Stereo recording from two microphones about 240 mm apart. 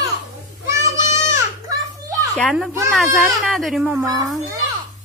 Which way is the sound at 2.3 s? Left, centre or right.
Centre.